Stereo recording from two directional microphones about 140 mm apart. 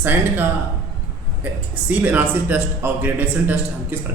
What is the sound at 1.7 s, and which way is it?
Speech, 10° right (ahead or behind).